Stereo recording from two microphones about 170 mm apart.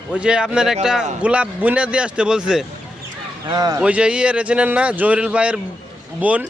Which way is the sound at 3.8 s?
5° right (ahead or behind).